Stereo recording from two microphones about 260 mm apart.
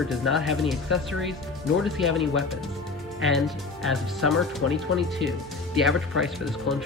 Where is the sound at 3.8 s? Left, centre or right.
Centre.